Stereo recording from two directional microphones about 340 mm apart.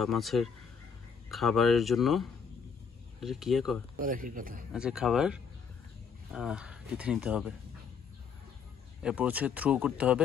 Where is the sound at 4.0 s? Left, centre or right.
Right.